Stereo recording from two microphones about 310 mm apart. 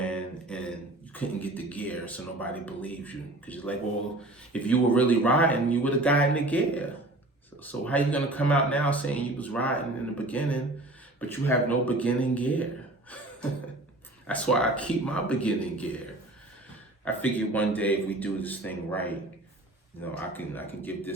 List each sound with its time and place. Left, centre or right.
0.0 s a sound: centre
1.1 s speech: centre
14.3 s speech: centre
17.1 s speech: centre